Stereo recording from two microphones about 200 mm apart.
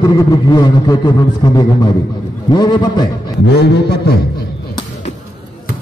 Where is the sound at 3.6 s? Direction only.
55° left (ahead or behind).